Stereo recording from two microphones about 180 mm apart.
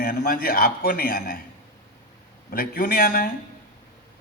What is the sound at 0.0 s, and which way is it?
A man's voice, 55° left (ahead or behind).